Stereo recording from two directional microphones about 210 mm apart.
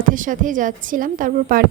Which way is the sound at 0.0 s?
40° right (ahead or behind).